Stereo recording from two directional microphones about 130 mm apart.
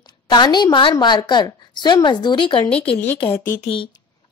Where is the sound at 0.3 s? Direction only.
35° left (ahead or behind).